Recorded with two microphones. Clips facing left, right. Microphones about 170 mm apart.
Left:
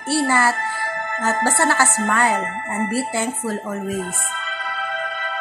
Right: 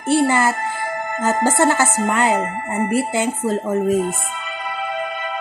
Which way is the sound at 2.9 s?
20° right (ahead or behind).